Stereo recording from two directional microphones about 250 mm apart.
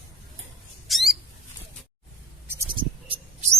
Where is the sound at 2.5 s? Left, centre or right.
Centre.